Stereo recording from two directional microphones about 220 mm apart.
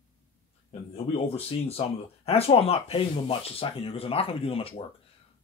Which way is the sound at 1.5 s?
25° left (ahead or behind).